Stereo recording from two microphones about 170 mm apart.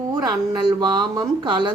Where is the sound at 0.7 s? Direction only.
25° right (ahead or behind).